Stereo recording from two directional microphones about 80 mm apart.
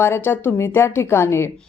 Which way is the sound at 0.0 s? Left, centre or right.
Left.